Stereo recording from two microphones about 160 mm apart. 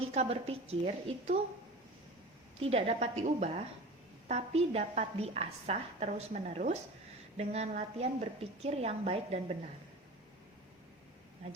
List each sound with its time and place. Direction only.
0.0 s a woman's voice: 40° right (ahead or behind)
2.6 s a woman's voice: 40° right (ahead or behind)